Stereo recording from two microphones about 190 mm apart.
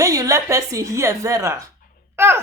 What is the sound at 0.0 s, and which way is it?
A child's voice, 15° right (ahead or behind).